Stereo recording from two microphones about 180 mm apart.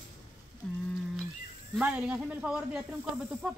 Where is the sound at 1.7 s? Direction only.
5° right (ahead or behind).